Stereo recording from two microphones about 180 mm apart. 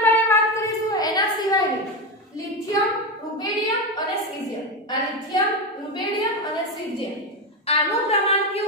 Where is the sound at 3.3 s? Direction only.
20° left (ahead or behind).